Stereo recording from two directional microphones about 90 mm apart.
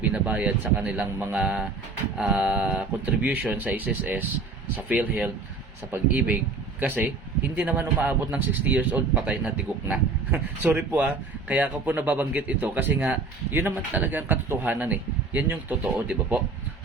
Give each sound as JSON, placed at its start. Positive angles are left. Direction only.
{"t": 0.1, "sound": "a man's voice", "side_deg": -15}